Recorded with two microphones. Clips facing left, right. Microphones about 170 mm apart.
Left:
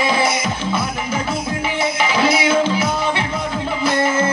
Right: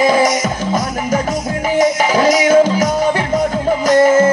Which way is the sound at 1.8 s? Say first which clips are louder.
Right 6 dB; 45° right (ahead or behind).